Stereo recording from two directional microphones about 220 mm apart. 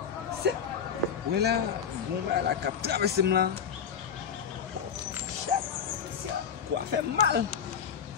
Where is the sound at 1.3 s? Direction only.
45° right (ahead or behind).